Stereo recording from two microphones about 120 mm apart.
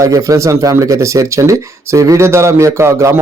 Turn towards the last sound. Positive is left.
turn(degrees=-25)  # may be behind; listen again after turning